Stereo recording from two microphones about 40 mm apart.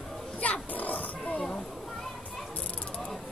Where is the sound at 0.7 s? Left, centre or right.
Left.